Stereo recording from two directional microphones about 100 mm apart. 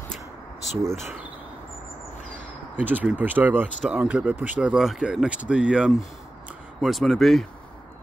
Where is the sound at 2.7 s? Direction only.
15° right (ahead or behind).